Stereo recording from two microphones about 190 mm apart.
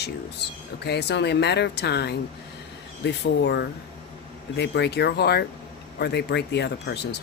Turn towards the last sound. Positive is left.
turn(degrees=60)  # may be behind; listen again after turning